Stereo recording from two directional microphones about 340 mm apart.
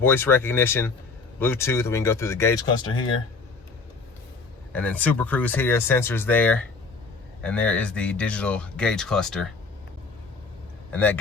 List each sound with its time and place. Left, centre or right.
0.0 s speech: centre
4.7 s speech: centre
10.9 s speech: centre